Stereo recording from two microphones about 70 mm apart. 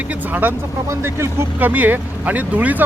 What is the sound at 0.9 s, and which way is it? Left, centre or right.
Speech, right.